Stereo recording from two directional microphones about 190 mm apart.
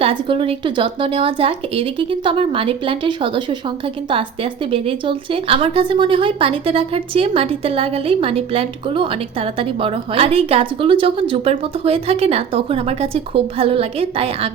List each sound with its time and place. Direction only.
0.0 s a woman's voice: 30° right (ahead or behind)